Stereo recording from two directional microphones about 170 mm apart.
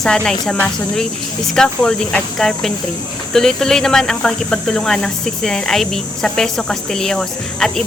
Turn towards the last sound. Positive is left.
turn(degrees=0)  # may be behind; listen again after turning